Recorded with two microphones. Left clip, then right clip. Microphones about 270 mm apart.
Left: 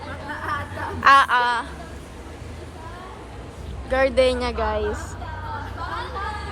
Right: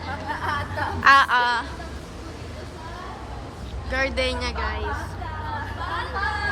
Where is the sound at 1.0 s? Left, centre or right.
Centre.